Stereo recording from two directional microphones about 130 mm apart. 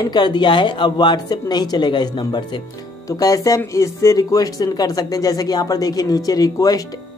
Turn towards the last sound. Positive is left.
turn(degrees=30)  # may be behind; listen again after turning